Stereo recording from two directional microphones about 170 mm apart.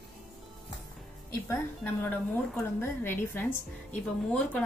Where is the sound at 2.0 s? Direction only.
10° left (ahead or behind).